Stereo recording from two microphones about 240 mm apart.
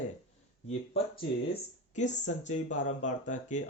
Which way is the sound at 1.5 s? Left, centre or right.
Left.